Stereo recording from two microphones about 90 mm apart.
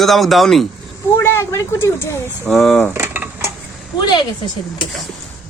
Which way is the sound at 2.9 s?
25° right (ahead or behind).